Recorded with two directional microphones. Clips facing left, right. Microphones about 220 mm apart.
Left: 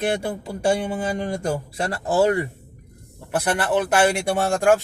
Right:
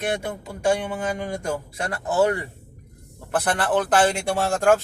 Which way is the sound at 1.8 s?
30° left (ahead or behind).